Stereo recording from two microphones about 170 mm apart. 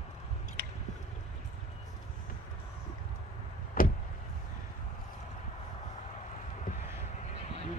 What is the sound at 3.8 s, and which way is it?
Vehicle, 55° left (ahead or behind).